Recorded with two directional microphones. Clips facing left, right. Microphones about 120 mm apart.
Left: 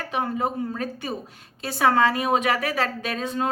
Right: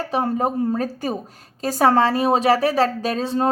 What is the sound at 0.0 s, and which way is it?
A woman's voice, 35° right (ahead or behind).